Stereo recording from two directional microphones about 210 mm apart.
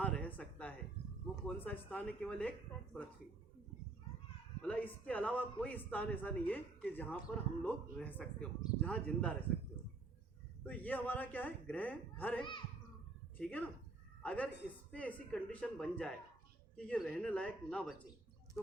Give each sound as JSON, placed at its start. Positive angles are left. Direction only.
{"t": 0.0, "sound": "a sound", "side_deg": 5}
{"t": 1.5, "sound": "a man's voice", "side_deg": 10}
{"t": 4.6, "sound": "a man's voice", "side_deg": 5}
{"t": 10.7, "sound": "a man's voice", "side_deg": 10}
{"t": 12.4, "sound": "a child's voice", "side_deg": 25}
{"t": 13.4, "sound": "a man's voice", "side_deg": 5}